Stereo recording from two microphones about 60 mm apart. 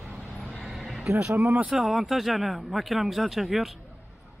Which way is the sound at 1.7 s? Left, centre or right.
Centre.